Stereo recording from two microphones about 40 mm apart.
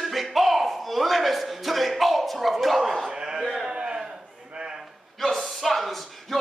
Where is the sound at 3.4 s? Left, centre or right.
Centre.